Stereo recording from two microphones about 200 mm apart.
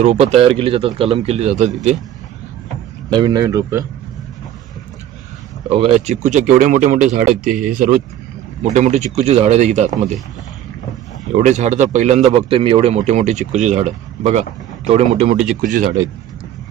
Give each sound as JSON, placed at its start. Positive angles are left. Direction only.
{"t": 0.0, "sound": "speech", "side_deg": -30}
{"t": 3.1, "sound": "speech", "side_deg": -20}
{"t": 5.6, "sound": "speech", "side_deg": -30}
{"t": 8.6, "sound": "speech", "side_deg": -35}
{"t": 11.3, "sound": "speech", "side_deg": -35}